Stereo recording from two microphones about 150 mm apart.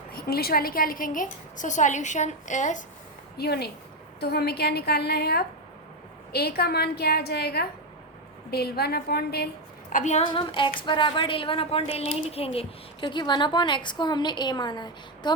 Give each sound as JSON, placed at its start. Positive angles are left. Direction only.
{"t": 0.1, "sound": "a woman's voice", "side_deg": 90}
{"t": 3.3, "sound": "a woman's voice", "side_deg": 90}
{"t": 9.9, "sound": "a woman's voice", "side_deg": 50}
{"t": 10.2, "sound": "a woman's voice", "side_deg": 35}